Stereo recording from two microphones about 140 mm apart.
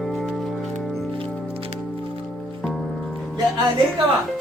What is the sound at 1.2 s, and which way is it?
Music, 40° right (ahead or behind).